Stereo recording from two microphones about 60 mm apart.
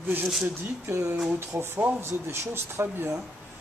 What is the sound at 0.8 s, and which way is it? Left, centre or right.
Speech, right.